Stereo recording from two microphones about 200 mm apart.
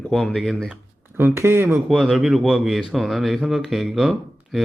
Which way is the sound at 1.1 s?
10° right (ahead or behind).